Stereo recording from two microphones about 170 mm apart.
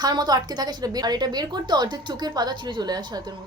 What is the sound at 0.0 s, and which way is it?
A woman's voice, 25° right (ahead or behind).